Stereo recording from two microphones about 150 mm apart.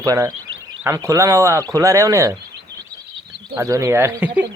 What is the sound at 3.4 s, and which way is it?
Speech, 20° right (ahead or behind).